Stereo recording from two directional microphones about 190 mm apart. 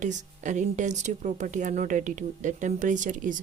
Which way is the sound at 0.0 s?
40° right (ahead or behind).